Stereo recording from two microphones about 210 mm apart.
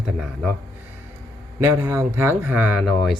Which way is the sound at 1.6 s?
15° right (ahead or behind).